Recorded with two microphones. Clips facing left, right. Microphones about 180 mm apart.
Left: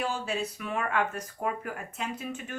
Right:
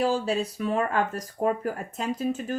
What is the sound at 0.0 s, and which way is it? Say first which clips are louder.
Speech: right 7 dB; 35° right (ahead or behind).